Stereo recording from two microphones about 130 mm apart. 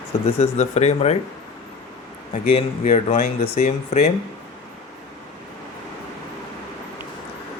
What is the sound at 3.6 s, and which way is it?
Speech, 60° left (ahead or behind).